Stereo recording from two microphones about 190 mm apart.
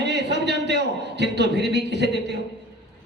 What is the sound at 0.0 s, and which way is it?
A man's voice, 65° right (ahead or behind).